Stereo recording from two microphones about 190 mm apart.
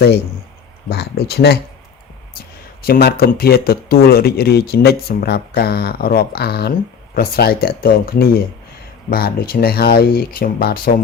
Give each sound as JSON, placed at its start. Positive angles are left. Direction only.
{"t": 0.9, "sound": "speech", "side_deg": 60}
{"t": 2.8, "sound": "speech", "side_deg": 55}